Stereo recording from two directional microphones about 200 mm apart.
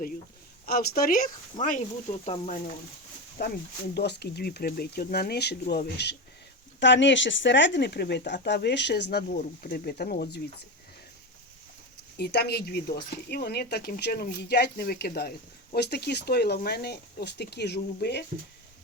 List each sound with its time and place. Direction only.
0.6 s speech: 50° left (ahead or behind); by 2.6 s 35° left (ahead or behind)
3.4 s speech: 55° left (ahead or behind)
12.1 s speech: 55° left (ahead or behind)